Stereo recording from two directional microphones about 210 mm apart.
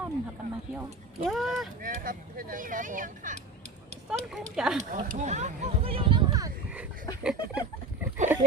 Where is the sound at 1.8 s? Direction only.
40° right (ahead or behind).